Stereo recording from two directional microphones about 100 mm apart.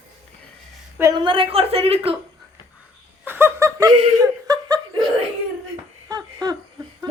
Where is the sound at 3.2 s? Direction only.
20° right (ahead or behind); by 5.0 s 35° right (ahead or behind).